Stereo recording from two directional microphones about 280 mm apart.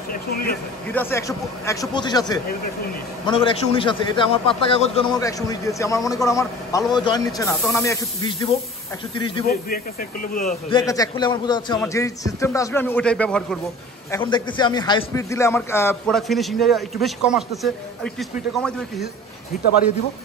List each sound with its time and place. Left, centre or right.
0.1 s a sound: left
0.9 s a man's voice: centre
10.2 s a man's voice: left
10.7 s a man's voice: centre
14.1 s a man's voice: centre